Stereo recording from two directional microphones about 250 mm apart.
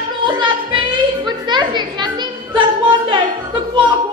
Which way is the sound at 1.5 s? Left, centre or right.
Centre.